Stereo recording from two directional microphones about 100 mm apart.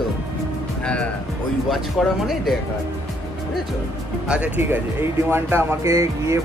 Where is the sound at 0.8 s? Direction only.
10° left (ahead or behind).